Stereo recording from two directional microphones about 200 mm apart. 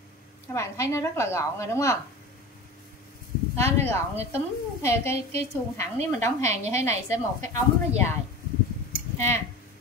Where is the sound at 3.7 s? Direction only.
10° left (ahead or behind).